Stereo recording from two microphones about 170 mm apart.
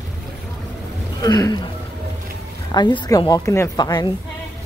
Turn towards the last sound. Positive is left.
turn(degrees=25)  # may be behind; listen again after turning